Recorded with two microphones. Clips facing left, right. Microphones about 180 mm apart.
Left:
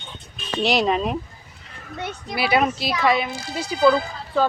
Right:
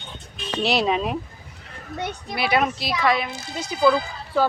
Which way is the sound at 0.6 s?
Centre (ahead or behind).